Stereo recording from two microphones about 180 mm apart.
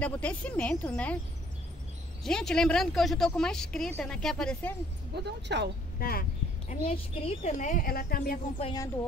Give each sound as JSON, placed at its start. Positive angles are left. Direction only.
{"t": 0.0, "sound": "speech", "side_deg": 5}
{"t": 2.2, "sound": "speech", "side_deg": 5}
{"t": 5.1, "sound": "speech", "side_deg": -70}
{"t": 5.9, "sound": "speech", "side_deg": 55}
{"t": 6.7, "sound": "speech", "side_deg": 30}
{"t": 7.5, "sound": "speech", "side_deg": 45}
{"t": 8.7, "sound": "speech", "side_deg": 15}